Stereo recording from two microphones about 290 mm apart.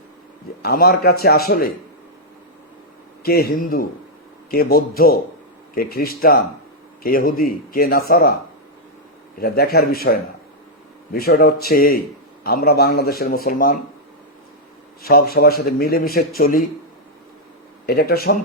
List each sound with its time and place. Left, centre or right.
0.6 s a man's voice: left
3.2 s a man's voice: left
9.4 s a man's voice: left
15.0 s a man's voice: left
17.8 s a man's voice: left